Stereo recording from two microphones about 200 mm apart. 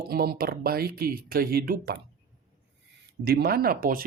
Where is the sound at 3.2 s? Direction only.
55° right (ahead or behind).